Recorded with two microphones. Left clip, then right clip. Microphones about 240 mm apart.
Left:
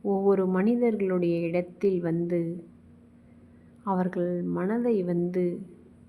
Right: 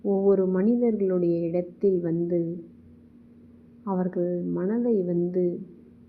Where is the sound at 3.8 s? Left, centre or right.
Left.